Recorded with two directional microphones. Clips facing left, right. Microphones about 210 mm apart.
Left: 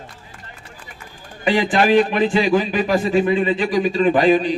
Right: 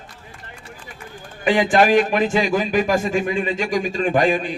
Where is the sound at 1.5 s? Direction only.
50° right (ahead or behind).